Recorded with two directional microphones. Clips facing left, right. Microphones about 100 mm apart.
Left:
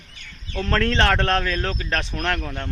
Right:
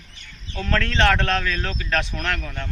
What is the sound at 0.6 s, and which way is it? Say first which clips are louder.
Speech: even; 35° left (ahead or behind).